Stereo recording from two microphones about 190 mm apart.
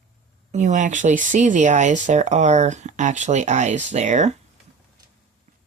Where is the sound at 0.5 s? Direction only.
40° right (ahead or behind).